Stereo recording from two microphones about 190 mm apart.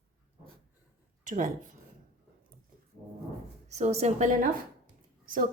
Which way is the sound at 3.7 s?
35° right (ahead or behind).